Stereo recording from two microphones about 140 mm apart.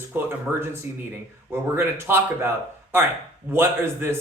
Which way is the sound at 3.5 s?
15° right (ahead or behind).